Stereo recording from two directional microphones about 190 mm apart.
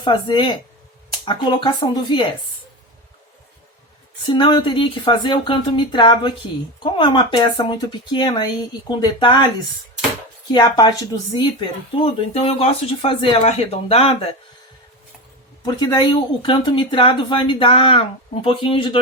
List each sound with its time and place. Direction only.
0.0 s speech: 25° left (ahead or behind)
4.3 s speech: 25° left (ahead or behind)
10.5 s speech: 20° left (ahead or behind)
12.0 s speech: 30° left (ahead or behind)
15.6 s speech: 25° left (ahead or behind)